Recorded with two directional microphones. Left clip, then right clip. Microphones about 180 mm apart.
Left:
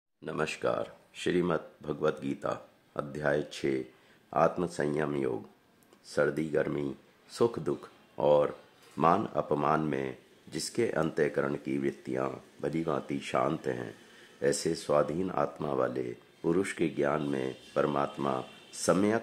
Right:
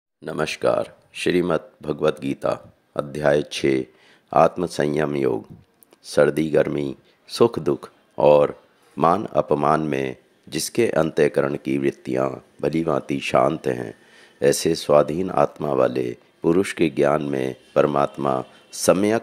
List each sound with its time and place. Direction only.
0.2 s speech: 35° right (ahead or behind)